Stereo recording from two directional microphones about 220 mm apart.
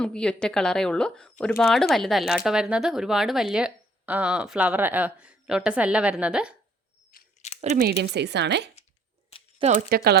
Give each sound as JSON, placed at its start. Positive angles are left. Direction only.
{"t": 0.0, "sound": "speech", "side_deg": 5}
{"t": 7.1, "sound": "a sound", "side_deg": 30}
{"t": 7.8, "sound": "a woman's voice", "side_deg": -45}
{"t": 9.9, "sound": "a woman's voice", "side_deg": -45}